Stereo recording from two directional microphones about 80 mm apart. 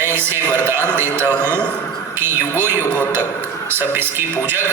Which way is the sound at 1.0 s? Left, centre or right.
Left.